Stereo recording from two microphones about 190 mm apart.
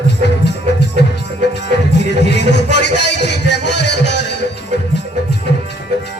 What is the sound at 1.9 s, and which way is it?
Music, 65° left (ahead or behind).